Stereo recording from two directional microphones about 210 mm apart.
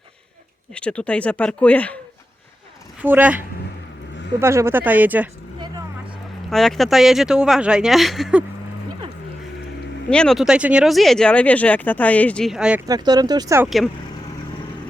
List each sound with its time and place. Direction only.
0.7 s speech: 5° left (ahead or behind)
3.0 s speech: 10° right (ahead or behind)
6.5 s speech: centre (ahead or behind)
10.1 s speech: 5° left (ahead or behind)
12.9 s speech: 20° right (ahead or behind)